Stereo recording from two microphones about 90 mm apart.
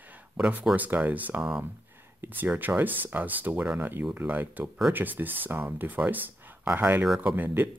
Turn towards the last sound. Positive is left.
turn(degrees=-20)  # may be behind; listen again after turning